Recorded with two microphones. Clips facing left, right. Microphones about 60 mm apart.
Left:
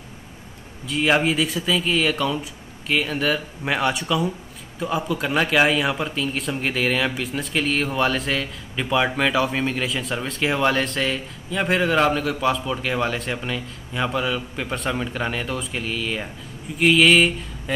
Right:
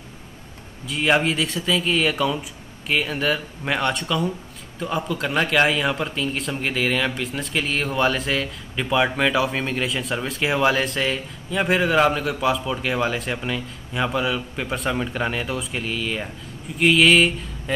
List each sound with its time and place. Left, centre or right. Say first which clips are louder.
0.8 s speech: even; centre